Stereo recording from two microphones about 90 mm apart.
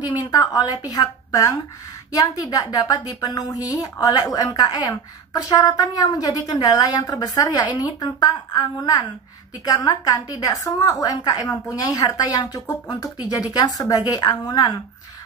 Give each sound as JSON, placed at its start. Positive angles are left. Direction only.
{"t": 0.0, "sound": "a woman's voice", "side_deg": 45}